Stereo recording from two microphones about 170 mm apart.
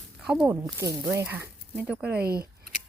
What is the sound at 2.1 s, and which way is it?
Speech, 65° right (ahead or behind).